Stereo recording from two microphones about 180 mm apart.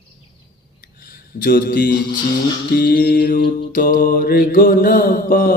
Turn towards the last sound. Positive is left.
turn(degrees=55)  # may be behind; listen again after turning